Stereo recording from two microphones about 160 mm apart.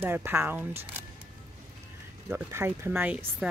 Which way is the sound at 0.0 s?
15° right (ahead or behind).